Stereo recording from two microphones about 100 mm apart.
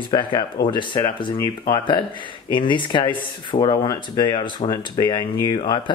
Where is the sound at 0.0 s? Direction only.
50° left (ahead or behind).